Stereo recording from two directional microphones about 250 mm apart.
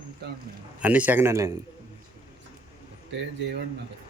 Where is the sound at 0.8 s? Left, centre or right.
Centre.